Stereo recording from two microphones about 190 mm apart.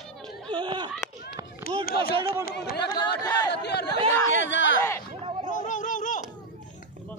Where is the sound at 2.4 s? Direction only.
55° left (ahead or behind).